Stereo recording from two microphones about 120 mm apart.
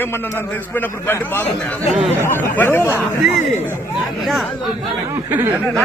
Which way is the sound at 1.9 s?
Centre (ahead or behind).